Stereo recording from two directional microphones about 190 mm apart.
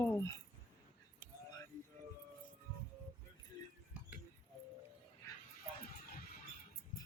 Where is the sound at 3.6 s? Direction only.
20° left (ahead or behind).